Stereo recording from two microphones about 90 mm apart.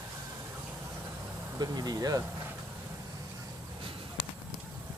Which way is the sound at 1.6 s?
45° right (ahead or behind).